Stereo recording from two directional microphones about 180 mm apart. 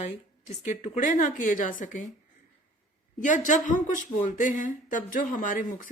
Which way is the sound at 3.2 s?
45° left (ahead or behind).